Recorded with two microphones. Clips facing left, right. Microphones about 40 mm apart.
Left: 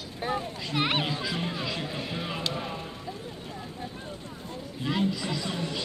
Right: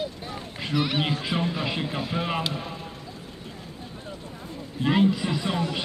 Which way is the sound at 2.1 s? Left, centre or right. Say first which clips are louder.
Right 6 dB; right.